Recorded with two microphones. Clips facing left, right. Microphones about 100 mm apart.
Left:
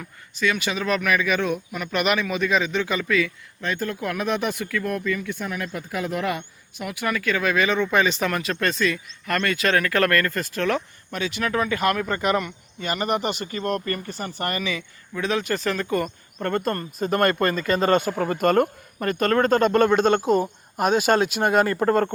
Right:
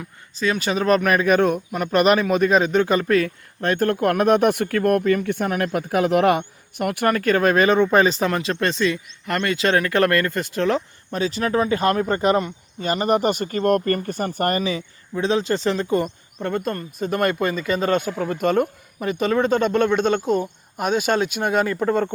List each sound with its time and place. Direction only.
0.3 s speech: 35° right (ahead or behind)
16.4 s speech: 5° right (ahead or behind)